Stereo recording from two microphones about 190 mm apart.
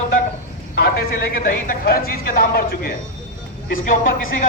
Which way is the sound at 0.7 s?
60° left (ahead or behind).